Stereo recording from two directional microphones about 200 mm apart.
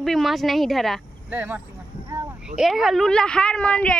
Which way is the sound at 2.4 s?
5° right (ahead or behind).